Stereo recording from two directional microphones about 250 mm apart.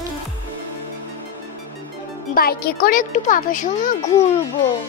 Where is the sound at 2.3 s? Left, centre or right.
Left.